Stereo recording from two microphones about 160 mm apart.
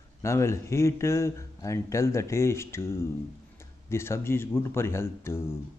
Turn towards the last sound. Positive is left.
turn(degrees=15)  # may be behind; listen again after turning